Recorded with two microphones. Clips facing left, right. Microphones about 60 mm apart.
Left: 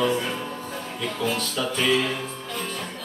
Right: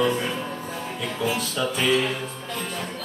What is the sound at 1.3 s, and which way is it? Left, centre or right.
Music, centre.